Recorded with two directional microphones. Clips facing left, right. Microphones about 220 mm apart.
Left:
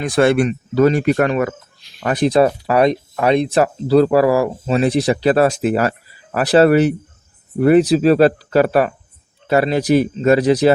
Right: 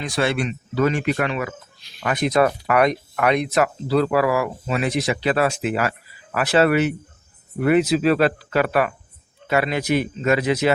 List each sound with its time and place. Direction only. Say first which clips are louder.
0.0 s speech: left 8 dB; 50° left (ahead or behind)
2.0 s speech: left 5 dB; 35° left (ahead or behind)